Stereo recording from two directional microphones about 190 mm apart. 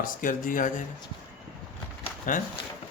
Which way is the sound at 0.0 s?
45° left (ahead or behind).